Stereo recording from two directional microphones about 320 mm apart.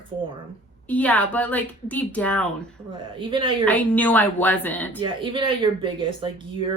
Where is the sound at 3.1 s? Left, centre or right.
Centre.